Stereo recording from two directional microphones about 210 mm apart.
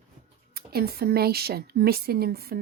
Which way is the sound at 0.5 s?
45° right (ahead or behind).